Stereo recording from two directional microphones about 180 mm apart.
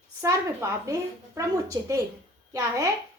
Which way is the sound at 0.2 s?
15° right (ahead or behind).